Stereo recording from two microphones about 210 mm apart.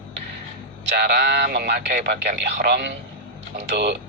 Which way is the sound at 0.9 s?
50° right (ahead or behind).